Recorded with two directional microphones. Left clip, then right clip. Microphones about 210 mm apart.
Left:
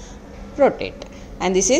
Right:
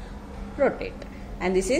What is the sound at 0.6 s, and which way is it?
A woman's voice, 30° left (ahead or behind).